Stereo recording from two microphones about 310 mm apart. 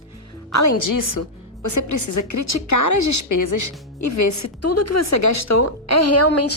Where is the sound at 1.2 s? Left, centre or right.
Left.